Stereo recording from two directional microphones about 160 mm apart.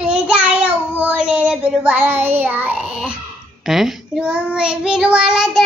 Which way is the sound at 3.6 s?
Centre (ahead or behind).